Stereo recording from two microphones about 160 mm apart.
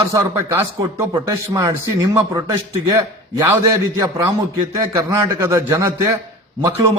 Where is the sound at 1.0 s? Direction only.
20° right (ahead or behind).